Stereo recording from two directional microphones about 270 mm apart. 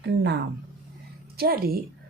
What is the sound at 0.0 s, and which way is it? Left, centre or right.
Speech, right.